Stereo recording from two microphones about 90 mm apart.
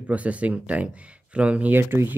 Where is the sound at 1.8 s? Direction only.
25° right (ahead or behind).